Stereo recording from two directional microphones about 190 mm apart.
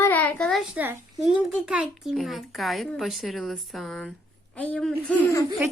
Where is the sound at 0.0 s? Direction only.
10° left (ahead or behind).